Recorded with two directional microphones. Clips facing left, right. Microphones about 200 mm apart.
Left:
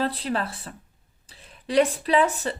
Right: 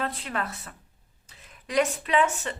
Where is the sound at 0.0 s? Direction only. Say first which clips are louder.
Left 5 dB; 35° left (ahead or behind).